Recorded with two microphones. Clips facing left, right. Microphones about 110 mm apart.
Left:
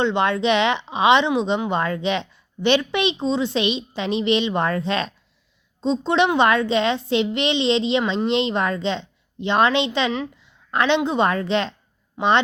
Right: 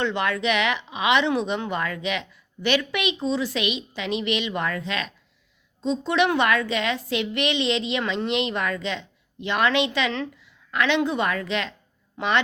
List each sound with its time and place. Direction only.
0.0 s a woman's voice: 25° left (ahead or behind)